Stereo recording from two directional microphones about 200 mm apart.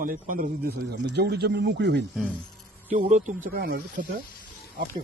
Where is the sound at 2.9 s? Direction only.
35° right (ahead or behind).